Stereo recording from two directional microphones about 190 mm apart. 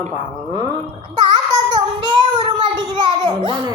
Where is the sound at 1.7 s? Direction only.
20° right (ahead or behind).